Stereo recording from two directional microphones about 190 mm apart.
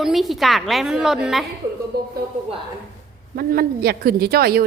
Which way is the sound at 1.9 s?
55° right (ahead or behind).